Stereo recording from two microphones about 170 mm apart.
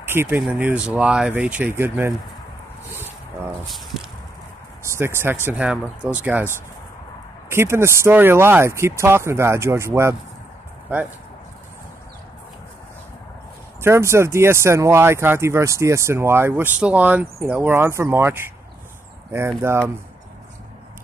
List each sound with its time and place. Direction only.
0.0 s speech: 15° right (ahead or behind)
3.6 s speech: centre (ahead or behind)
4.9 s speech: 15° right (ahead or behind)
13.7 s speech: 15° right (ahead or behind)